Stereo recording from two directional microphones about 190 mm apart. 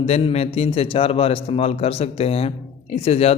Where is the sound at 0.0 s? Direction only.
35° left (ahead or behind).